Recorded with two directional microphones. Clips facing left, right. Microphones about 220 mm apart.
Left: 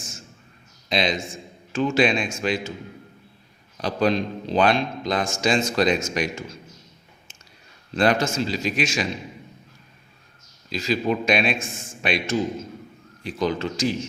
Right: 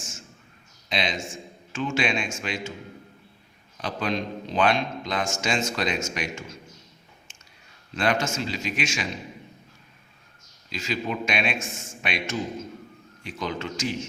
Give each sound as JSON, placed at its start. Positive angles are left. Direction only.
{"t": 0.9, "sound": "a man's voice", "side_deg": 35}
{"t": 3.8, "sound": "a man's voice", "side_deg": 35}
{"t": 7.9, "sound": "a man's voice", "side_deg": 35}
{"t": 10.7, "sound": "a man's voice", "side_deg": 35}